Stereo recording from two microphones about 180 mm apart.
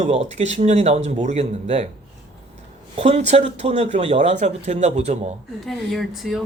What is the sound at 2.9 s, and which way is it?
Speech, 35° right (ahead or behind).